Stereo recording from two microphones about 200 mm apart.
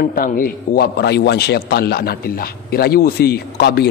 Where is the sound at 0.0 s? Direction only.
45° left (ahead or behind).